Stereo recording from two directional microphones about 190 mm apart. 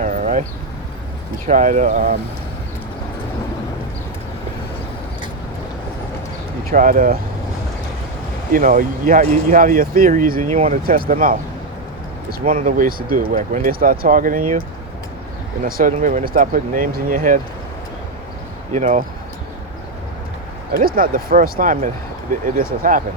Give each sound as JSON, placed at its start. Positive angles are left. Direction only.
{"t": 0.0, "sound": "a sound", "side_deg": -40}
{"t": 1.5, "sound": "speech", "side_deg": -40}
{"t": 6.7, "sound": "speech", "side_deg": -45}
{"t": 8.5, "sound": "speech", "side_deg": -45}
{"t": 12.5, "sound": "speech", "side_deg": -45}
{"t": 15.6, "sound": "speech", "side_deg": -45}
{"t": 18.7, "sound": "speech", "side_deg": -40}
{"t": 20.7, "sound": "speech", "side_deg": -50}